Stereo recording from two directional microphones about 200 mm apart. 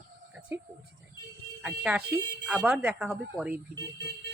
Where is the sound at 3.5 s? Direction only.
55° right (ahead or behind).